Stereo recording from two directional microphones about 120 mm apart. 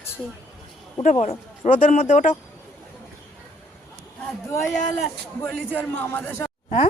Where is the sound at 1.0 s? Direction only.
85° left.